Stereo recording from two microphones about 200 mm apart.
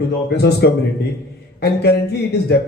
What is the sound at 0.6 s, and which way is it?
Speech, 55° left (ahead or behind).